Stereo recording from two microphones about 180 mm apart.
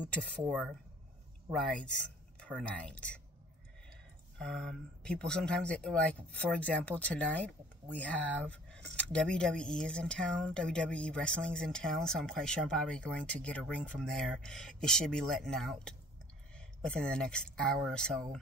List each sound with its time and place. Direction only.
0.0 s speech: 5° left (ahead or behind)
1.5 s speech: centre (ahead or behind)
4.4 s speech: 5° left (ahead or behind)